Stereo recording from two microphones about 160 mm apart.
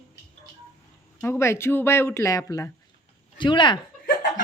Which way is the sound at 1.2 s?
15° left (ahead or behind).